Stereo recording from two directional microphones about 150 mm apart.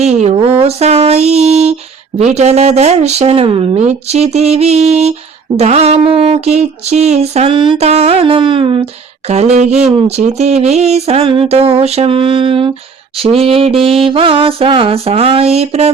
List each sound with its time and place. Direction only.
0.0 s a sound: 45° right (ahead or behind)
2.1 s speech: 45° right (ahead or behind)
7.9 s mantra: 45° right (ahead or behind)
9.2 s speech: 45° right (ahead or behind)
13.1 s mantra: 40° right (ahead or behind)